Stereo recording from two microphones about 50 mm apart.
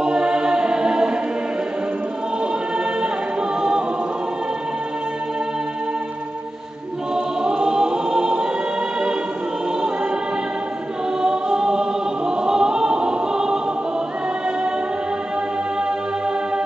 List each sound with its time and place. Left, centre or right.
0.0 s choir: centre
7.2 s choir: centre
11.1 s choir: centre